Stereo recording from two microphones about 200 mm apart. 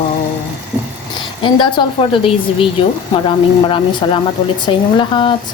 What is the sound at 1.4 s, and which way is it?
A woman's voice, 25° left (ahead or behind).